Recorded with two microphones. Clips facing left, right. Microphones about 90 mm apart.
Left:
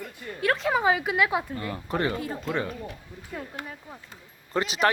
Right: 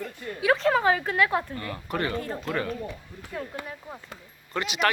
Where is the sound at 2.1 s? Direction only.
5° left (ahead or behind).